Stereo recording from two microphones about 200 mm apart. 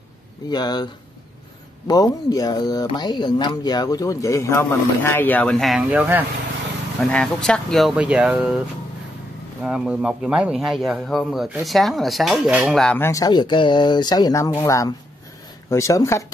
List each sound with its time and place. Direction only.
0.5 s speech: 20° left (ahead or behind)
1.9 s speech: 20° left (ahead or behind); by 6.2 s 10° right (ahead or behind)
7.0 s a man's voice: 5° left (ahead or behind)
9.6 s a man's voice: 5° right (ahead or behind); by 16.3 s 15° left (ahead or behind)